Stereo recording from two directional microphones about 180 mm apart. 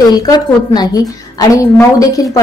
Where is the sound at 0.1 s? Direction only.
20° left (ahead or behind).